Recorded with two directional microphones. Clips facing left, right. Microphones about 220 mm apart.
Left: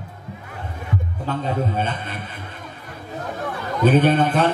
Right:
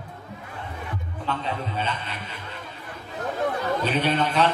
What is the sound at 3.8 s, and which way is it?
Speech, 50° left (ahead or behind).